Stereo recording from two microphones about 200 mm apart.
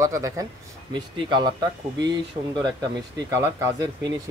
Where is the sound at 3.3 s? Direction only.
15° right (ahead or behind).